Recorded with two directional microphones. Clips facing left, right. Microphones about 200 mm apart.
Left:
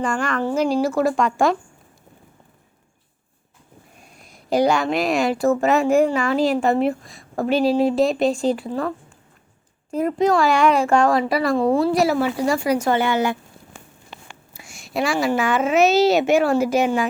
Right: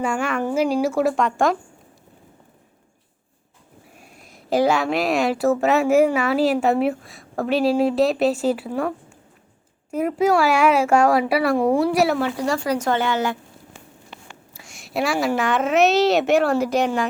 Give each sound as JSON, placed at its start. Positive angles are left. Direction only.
{"t": 0.0, "sound": "speech", "side_deg": -5}
{"t": 3.9, "sound": "speech", "side_deg": -5}
{"t": 9.9, "sound": "speech", "side_deg": -5}
{"t": 11.9, "sound": "a woman's voice", "side_deg": 0}
{"t": 13.7, "sound": "a sound", "side_deg": 45}
{"t": 14.3, "sound": "whispering", "side_deg": 15}
{"t": 14.7, "sound": "speech", "side_deg": 0}